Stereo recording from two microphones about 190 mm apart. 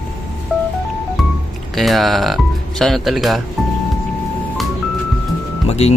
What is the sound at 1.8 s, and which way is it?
Speech, centre (ahead or behind).